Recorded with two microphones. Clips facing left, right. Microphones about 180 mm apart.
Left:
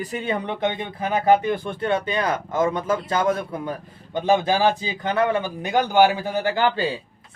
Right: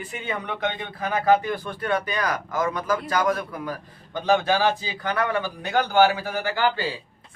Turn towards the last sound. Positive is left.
turn(degrees=20)  # may be behind; listen again after turning